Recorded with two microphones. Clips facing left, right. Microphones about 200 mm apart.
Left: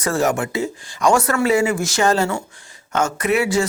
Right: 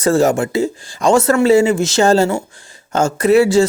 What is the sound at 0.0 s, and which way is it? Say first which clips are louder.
Speech: right 6 dB; 25° right (ahead or behind).